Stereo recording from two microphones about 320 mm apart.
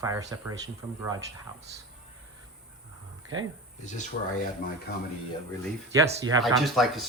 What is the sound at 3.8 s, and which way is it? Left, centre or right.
Speech, left.